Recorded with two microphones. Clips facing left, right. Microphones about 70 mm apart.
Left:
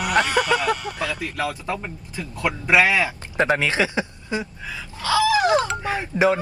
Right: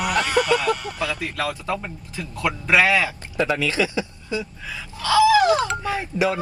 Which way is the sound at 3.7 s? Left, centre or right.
Left.